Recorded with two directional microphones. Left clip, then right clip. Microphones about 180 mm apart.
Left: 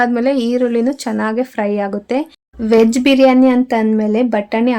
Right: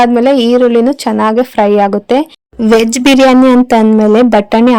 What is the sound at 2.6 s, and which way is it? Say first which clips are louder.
Speech: right 3 dB; 45° right (ahead or behind).